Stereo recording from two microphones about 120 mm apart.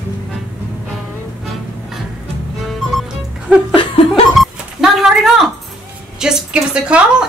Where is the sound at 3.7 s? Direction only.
50° left (ahead or behind).